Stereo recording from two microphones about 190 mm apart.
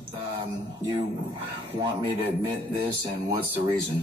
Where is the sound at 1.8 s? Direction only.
20° right (ahead or behind).